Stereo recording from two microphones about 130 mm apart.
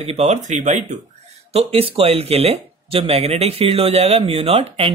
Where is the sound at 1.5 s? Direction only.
50° right (ahead or behind).